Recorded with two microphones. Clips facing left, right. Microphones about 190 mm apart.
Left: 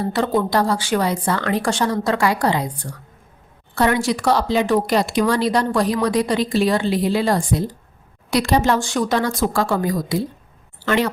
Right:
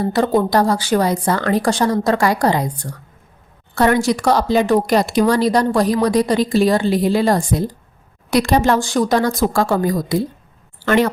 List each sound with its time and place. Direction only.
0.0 s a woman's voice: 40° right (ahead or behind)
3.8 s a woman's voice: 45° right (ahead or behind)
8.8 s a woman's voice: 40° right (ahead or behind)